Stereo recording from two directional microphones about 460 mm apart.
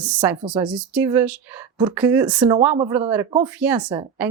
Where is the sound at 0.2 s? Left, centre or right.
Centre.